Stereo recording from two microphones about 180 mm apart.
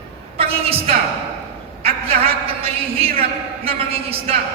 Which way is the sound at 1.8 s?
35° right (ahead or behind).